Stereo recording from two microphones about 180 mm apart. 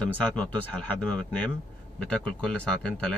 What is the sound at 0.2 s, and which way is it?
A man's voice, 5° left (ahead or behind).